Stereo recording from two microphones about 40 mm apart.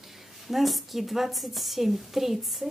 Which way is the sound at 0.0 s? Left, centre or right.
Centre.